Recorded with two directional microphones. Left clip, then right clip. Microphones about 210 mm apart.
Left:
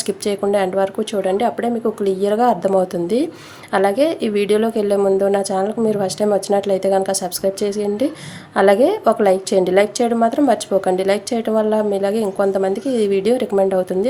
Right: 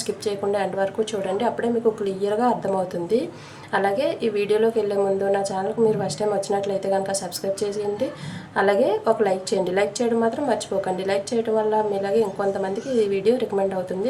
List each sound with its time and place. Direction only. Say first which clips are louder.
0.3 s a woman's voice: left 6 dB; 40° left (ahead or behind)